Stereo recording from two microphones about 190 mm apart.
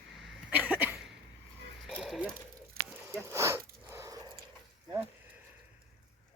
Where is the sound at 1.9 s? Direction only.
Centre (ahead or behind).